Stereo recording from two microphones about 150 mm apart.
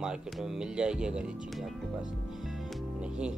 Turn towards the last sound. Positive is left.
turn(degrees=-5)  # may be behind; listen again after turning